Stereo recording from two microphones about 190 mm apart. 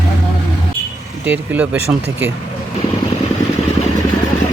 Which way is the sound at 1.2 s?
10° right (ahead or behind).